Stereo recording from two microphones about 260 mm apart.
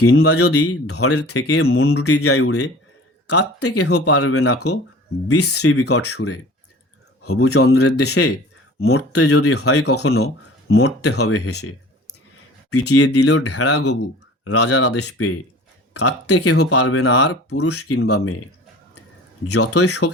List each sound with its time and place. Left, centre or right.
0.0 s speech: left
13.1 s speech: left
19.5 s speech: left